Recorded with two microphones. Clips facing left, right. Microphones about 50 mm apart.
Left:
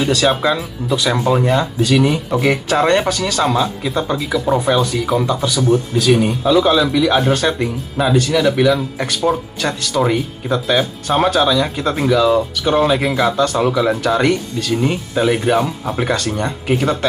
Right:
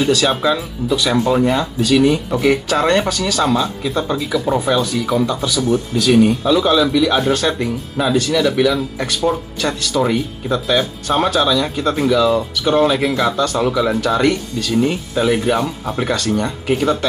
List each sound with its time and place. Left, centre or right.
0.0 s speech: centre
3.1 s speech: centre
3.3 s speech: centre